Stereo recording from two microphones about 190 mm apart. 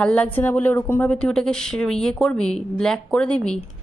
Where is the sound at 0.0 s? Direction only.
5° left (ahead or behind).